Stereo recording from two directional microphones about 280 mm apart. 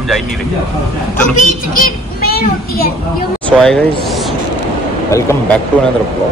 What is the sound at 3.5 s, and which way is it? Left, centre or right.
Speech, centre.